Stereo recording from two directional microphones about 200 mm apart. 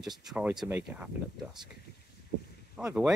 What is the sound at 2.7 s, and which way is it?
Speech, 5° right (ahead or behind).